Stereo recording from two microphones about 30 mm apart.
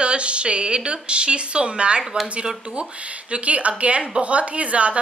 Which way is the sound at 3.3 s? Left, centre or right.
Right.